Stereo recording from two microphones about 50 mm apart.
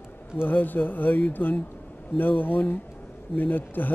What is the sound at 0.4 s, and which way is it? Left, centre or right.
Speech, left.